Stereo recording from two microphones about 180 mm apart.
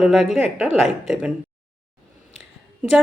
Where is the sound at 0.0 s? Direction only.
Centre (ahead or behind).